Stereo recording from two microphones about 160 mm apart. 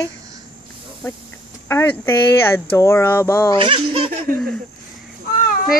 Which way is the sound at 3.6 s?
35° right (ahead or behind).